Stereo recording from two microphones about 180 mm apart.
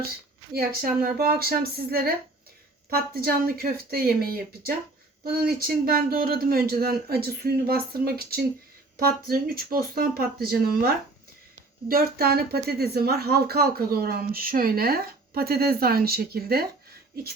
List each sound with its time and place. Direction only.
0.5 s speech: 55° right (ahead or behind)